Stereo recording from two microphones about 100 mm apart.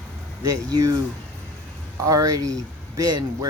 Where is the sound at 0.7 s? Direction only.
40° right (ahead or behind).